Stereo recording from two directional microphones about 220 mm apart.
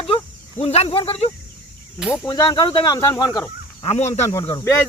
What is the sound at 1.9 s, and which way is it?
Speech, 5° right (ahead or behind).